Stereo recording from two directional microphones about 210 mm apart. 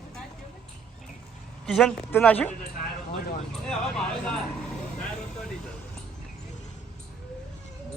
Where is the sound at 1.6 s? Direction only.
Centre (ahead or behind).